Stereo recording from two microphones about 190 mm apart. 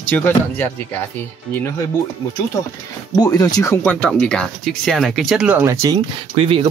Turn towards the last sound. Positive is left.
turn(degrees=-30)  # may be behind; listen again after turning